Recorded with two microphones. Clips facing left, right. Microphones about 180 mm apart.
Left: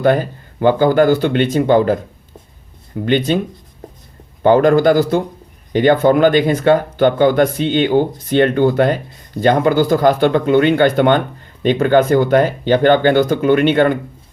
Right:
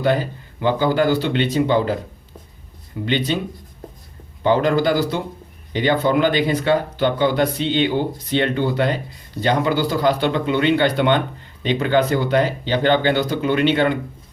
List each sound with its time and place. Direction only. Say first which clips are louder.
0.0 s speech: left 5 dB; 50° left (ahead or behind)
3.1 s speech: left 6 dB; 50° left (ahead or behind)
4.4 s speech: left 6 dB; 50° left (ahead or behind)